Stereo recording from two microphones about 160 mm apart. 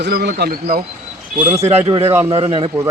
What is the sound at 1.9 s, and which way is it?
Speech, 35° right (ahead or behind).